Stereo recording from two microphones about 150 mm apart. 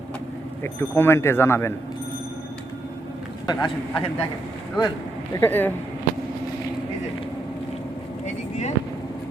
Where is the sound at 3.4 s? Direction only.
30° left (ahead or behind).